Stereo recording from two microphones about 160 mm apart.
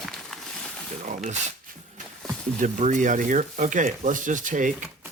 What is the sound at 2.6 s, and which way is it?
Speech, 50° right (ahead or behind).